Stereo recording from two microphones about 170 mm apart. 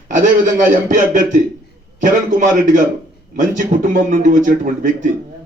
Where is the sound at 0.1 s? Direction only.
50° right (ahead or behind).